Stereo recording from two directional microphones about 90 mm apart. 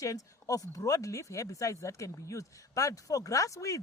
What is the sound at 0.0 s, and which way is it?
Speech, 35° left (ahead or behind).